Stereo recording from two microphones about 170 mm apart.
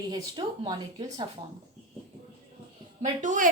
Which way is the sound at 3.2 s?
50° right (ahead or behind).